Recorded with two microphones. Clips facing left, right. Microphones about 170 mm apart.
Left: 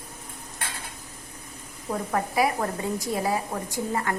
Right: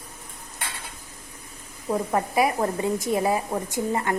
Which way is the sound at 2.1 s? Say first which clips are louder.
Right 1 dB; 20° right (ahead or behind).